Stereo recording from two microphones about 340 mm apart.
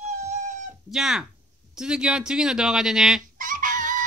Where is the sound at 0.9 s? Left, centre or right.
Centre.